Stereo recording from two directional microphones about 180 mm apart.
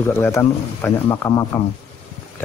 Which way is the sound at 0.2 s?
10° left (ahead or behind).